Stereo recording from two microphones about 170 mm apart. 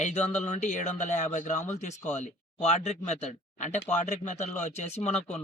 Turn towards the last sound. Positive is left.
turn(degrees=40)  # may be behind; listen again after turning